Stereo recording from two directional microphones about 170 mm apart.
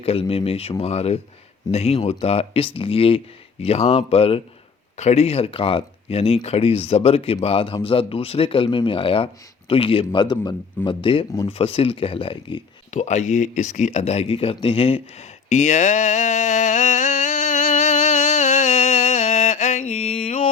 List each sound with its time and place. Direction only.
0.0 s speech: 35° left (ahead or behind)
12.9 s speech: 45° left (ahead or behind)
15.4 s a sound: 45° left (ahead or behind)